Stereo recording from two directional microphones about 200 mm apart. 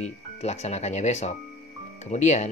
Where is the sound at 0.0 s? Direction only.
35° left (ahead or behind).